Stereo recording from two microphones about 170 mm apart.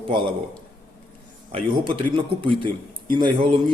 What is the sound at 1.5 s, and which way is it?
A man's voice, 30° right (ahead or behind).